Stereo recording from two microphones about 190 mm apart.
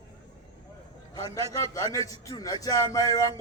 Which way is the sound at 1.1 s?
20° left (ahead or behind).